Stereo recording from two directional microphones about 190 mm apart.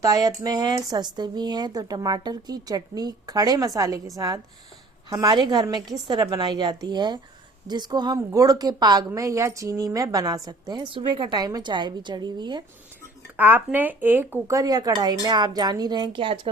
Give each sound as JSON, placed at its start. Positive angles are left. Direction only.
{"t": 0.0, "sound": "a woman's voice", "side_deg": -20}
{"t": 13.3, "sound": "a woman's voice", "side_deg": -10}